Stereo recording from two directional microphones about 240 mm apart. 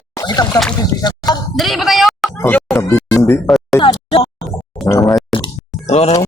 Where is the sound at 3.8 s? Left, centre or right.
Left.